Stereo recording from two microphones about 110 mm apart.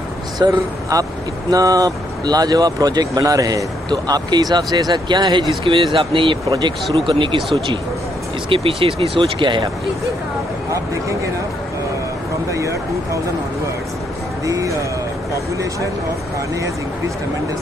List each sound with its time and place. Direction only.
0.4 s speech: 35° right (ahead or behind)
8.5 s speech: 55° right (ahead or behind)
12.4 s speech: 30° right (ahead or behind)
14.4 s speech: 30° right (ahead or behind)